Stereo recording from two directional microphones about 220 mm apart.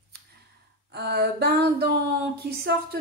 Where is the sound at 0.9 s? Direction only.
45° right (ahead or behind).